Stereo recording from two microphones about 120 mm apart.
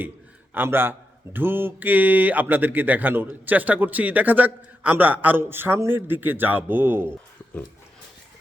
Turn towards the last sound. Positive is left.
turn(degrees=-20)  # may be behind; listen again after turning